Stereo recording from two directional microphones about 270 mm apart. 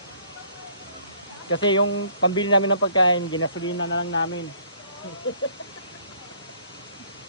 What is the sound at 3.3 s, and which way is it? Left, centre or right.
Speech, left.